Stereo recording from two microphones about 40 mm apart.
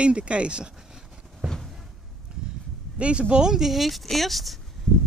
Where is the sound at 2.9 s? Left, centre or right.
Right.